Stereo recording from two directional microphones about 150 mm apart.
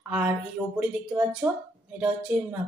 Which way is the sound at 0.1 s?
5° right (ahead or behind).